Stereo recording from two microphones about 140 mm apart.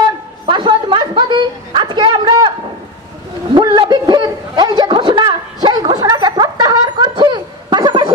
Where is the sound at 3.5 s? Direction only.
35° right (ahead or behind).